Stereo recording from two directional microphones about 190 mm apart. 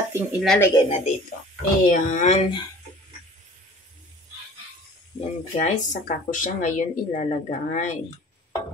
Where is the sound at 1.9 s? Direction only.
45° left (ahead or behind).